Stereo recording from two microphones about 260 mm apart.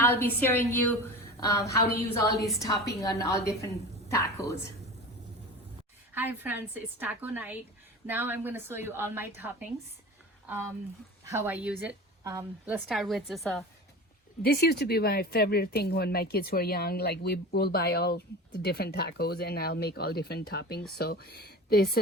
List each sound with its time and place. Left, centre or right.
0.0 s a woman's voice: centre
6.1 s a woman's voice: centre
11.3 s a woman's voice: centre
14.4 s speech: left